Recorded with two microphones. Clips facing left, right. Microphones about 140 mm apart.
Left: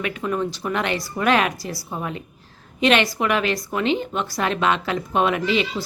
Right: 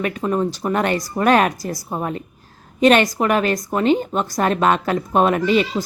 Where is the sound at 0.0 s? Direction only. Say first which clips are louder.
Right 4 dB; 40° right (ahead or behind).